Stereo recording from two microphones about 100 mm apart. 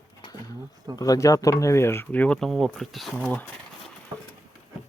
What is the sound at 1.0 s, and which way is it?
Speech, 35° left (ahead or behind).